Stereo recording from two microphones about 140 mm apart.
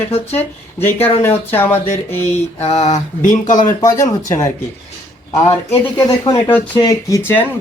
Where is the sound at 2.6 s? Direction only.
50° left (ahead or behind).